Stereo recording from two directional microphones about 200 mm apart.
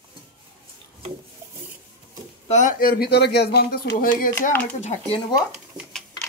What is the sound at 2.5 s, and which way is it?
Speech, 40° left (ahead or behind).